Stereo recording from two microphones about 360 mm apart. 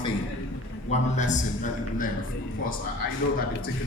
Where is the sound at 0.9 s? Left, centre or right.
Centre.